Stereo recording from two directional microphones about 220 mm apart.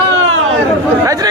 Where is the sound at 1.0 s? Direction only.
15° right (ahead or behind).